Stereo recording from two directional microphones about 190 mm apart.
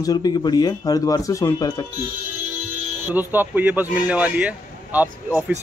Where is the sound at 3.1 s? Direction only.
10° right (ahead or behind).